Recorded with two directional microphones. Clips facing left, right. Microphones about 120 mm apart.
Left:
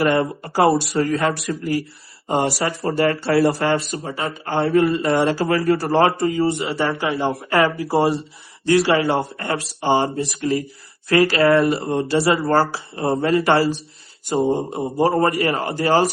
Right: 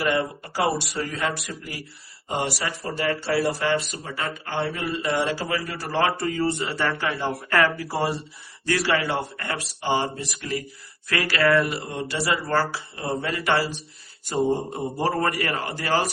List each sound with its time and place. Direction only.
0.0 s a man's voice: 45° left (ahead or behind)
2.6 s a man's voice: 40° left (ahead or behind); by 3.5 s 55° left (ahead or behind)
3.6 s a man's voice: 40° left (ahead or behind)
6.1 s speech: 20° left (ahead or behind)
14.3 s speech: 20° left (ahead or behind)